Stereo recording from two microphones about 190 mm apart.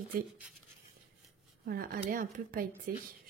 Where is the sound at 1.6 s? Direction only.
50° right (ahead or behind).